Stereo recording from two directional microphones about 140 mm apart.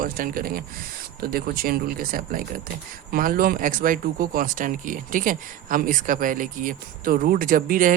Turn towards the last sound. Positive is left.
turn(degrees=-80)